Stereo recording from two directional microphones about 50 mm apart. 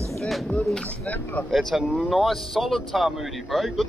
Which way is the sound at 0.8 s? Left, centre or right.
Left.